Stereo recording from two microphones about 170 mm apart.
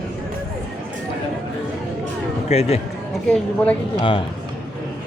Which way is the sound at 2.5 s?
40° left (ahead or behind).